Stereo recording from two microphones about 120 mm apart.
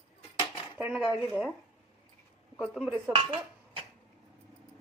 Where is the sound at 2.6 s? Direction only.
10° right (ahead or behind).